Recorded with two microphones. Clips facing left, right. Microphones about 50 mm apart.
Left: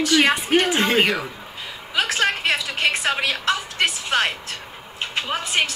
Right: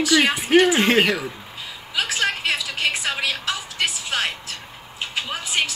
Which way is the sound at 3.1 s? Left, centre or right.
Left.